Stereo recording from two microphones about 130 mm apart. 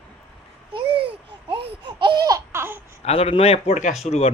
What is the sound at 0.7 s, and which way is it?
Babbling, 45° right (ahead or behind).